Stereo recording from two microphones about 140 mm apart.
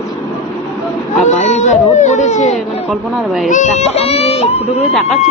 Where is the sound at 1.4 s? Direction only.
55° left (ahead or behind).